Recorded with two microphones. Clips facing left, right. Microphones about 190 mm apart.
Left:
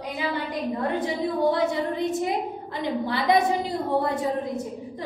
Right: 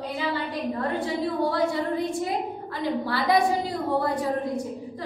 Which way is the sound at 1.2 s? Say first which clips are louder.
Left 2 dB; 20° left (ahead or behind).